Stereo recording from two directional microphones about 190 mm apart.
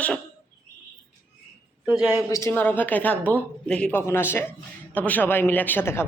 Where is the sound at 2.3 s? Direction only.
15° left (ahead or behind).